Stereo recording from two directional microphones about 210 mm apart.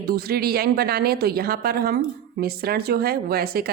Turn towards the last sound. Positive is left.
turn(degrees=-45)  # may be behind; listen again after turning